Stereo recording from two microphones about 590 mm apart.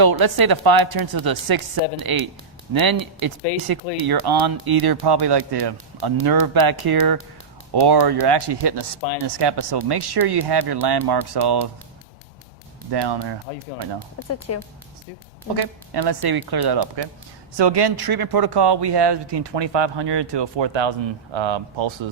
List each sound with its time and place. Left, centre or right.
0.0 s speech: right
12.9 s speech: right
14.2 s speech: left
15.5 s speech: right